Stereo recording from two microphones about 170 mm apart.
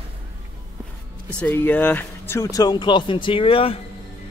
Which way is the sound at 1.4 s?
10° left (ahead or behind).